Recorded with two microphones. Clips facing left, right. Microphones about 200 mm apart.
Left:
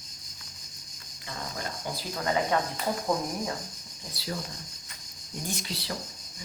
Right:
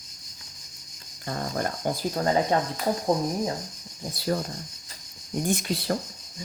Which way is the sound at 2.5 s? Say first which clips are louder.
Right 3 dB; 35° right (ahead or behind).